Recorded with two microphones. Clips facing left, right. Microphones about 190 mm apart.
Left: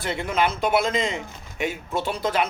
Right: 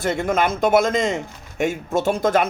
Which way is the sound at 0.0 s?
45° right (ahead or behind).